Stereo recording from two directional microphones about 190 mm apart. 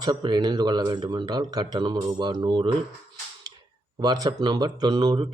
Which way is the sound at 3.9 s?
20° right (ahead or behind).